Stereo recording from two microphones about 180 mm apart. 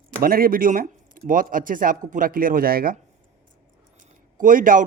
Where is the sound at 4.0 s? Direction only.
45° right (ahead or behind).